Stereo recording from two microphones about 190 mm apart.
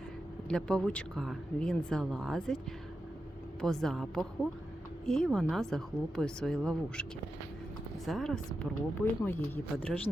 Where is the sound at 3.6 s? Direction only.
Centre (ahead or behind).